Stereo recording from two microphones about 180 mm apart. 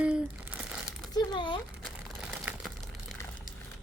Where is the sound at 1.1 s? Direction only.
25° left (ahead or behind).